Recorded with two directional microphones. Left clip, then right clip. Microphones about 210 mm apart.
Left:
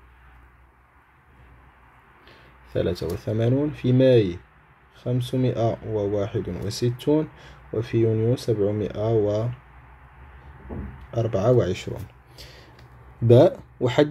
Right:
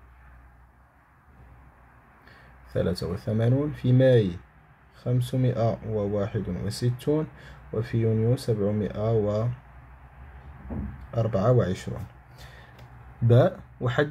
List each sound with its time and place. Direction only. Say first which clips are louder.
2.7 s speech: left 3 dB; 20° left (ahead or behind)
11.1 s speech: left 3 dB; 25° left (ahead or behind)
13.3 s speech: left 6 dB; 30° left (ahead or behind)